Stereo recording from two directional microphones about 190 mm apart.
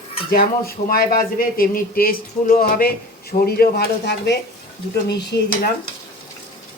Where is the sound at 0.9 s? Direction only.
50° left (ahead or behind).